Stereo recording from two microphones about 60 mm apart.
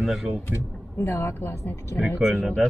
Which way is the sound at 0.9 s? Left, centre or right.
Left.